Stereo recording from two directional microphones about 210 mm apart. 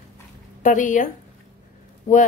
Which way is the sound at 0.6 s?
40° left (ahead or behind).